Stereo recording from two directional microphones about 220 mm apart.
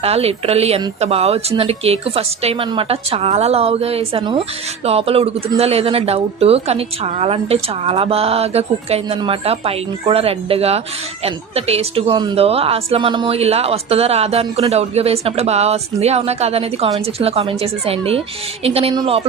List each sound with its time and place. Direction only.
0.0 s speech: 25° right (ahead or behind)